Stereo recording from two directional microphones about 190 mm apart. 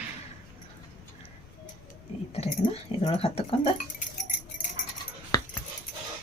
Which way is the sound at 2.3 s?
30° left (ahead or behind).